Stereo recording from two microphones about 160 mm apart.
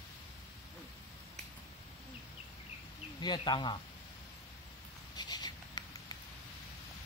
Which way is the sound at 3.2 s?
25° left (ahead or behind).